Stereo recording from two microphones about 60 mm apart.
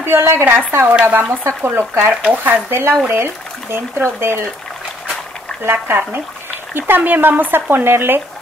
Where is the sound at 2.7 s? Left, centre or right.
Right.